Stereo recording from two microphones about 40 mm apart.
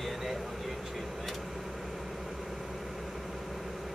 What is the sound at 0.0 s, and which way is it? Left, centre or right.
Vehicle, centre.